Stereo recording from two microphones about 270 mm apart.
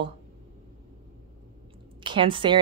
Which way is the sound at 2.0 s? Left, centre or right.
Centre.